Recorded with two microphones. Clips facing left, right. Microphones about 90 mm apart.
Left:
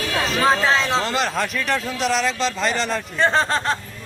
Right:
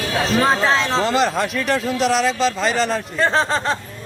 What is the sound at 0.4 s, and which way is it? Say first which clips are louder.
Speech: right 1 dB; centre (ahead or behind).